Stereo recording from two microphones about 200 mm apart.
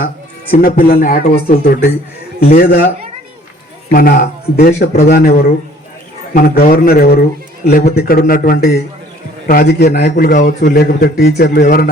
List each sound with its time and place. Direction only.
0.5 s a man's voice: 45° left (ahead or behind)
3.9 s a man's voice: 45° left (ahead or behind)